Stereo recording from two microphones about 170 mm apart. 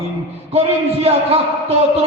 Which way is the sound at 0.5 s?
35° right (ahead or behind).